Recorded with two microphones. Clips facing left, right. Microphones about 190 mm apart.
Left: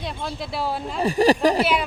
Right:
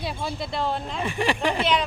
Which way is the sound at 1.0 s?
35° left (ahead or behind).